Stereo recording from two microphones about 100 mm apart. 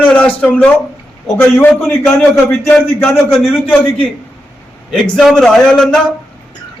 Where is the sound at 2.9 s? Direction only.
25° left (ahead or behind).